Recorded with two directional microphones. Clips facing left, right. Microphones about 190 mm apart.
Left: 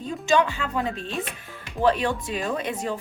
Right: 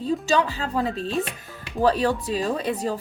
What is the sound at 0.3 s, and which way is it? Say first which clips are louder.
Speech: left 6 dB; 35° right (ahead or behind).